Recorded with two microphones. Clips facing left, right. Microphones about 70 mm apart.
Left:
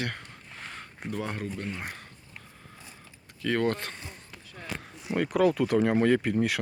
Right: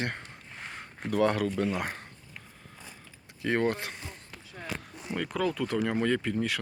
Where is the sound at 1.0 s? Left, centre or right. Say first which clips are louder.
Right 8 dB; right.